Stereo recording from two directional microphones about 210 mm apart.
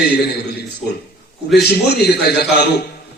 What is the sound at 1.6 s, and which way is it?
A man's voice, 50° left (ahead or behind).